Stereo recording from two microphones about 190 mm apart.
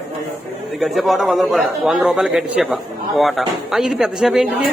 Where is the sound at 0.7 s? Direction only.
Centre (ahead or behind).